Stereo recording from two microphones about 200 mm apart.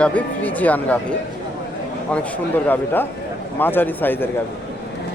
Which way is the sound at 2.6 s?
10° left (ahead or behind).